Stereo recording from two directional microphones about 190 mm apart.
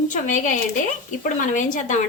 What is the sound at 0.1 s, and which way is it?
Speech, 40° left (ahead or behind).